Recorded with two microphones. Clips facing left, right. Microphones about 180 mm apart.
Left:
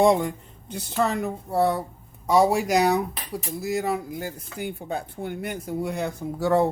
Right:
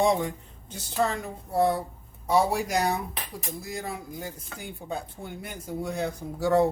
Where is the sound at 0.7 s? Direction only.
60° left (ahead or behind).